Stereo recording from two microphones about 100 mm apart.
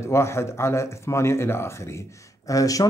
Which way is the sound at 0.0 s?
25° left (ahead or behind).